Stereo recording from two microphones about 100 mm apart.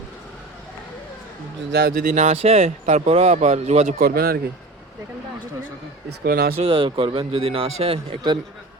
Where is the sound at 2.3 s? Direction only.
90° right.